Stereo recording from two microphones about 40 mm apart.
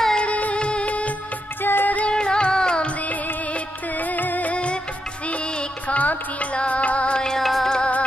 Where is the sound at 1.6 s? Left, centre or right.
Left.